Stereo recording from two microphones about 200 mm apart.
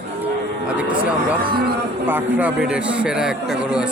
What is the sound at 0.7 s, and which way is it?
Speech, 5° right (ahead or behind).